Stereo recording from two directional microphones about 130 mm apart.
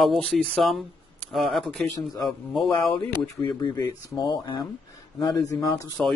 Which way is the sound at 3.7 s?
30° left (ahead or behind).